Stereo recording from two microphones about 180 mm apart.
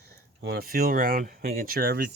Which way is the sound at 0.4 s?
60° right (ahead or behind).